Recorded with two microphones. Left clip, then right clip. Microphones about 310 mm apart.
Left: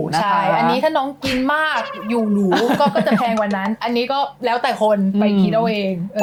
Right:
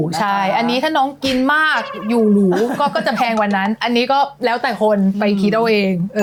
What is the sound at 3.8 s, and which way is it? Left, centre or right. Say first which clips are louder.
Speech: right 4 dB; right.